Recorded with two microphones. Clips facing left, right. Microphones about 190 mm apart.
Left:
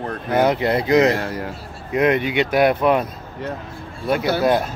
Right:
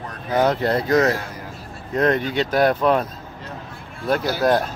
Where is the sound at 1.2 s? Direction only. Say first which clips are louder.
Left 7 dB; 70° left (ahead or behind).